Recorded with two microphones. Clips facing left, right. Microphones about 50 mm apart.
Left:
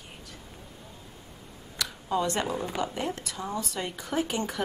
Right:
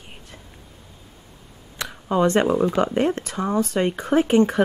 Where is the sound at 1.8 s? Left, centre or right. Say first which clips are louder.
Right 8 dB; right.